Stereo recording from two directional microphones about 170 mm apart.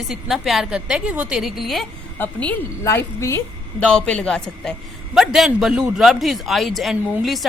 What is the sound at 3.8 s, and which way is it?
A man's voice, 5° left (ahead or behind).